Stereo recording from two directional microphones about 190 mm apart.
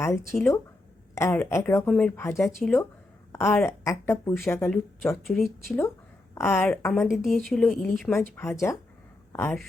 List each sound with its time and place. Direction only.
0.0 s a woman's voice: 15° left (ahead or behind)
2.4 s a woman's voice: centre (ahead or behind)
3.3 s a woman's voice: 15° left (ahead or behind)
5.2 s a woman's voice: centre (ahead or behind)
6.3 s a woman's voice: 10° left (ahead or behind)
6.9 s a woman's voice: centre (ahead or behind)
8.4 s a woman's voice: 15° left (ahead or behind)